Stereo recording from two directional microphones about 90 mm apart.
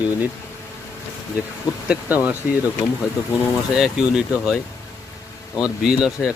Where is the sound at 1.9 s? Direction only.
15° right (ahead or behind).